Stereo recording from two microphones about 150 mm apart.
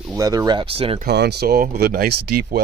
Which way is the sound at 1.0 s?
90° right.